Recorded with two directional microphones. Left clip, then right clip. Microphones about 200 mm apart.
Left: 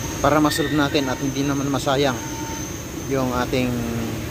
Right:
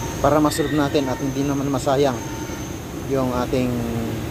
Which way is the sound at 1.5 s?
10° left (ahead or behind).